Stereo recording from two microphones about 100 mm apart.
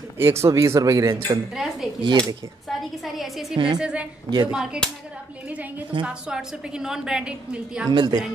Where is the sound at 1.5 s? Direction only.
Centre (ahead or behind).